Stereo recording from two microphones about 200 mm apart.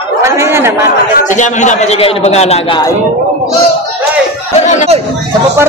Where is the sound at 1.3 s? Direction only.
40° left (ahead or behind).